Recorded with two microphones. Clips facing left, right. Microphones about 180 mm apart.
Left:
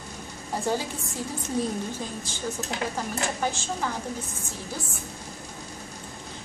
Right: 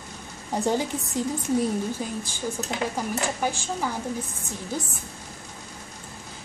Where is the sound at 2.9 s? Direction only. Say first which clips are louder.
Right 2 dB; 15° right (ahead or behind).